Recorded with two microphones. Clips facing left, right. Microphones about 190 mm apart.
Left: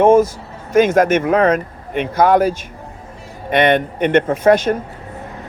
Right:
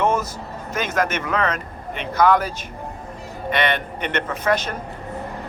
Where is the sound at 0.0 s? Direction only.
50° left (ahead or behind).